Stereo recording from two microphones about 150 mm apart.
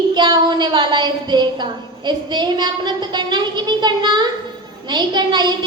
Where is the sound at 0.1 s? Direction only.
30° right (ahead or behind).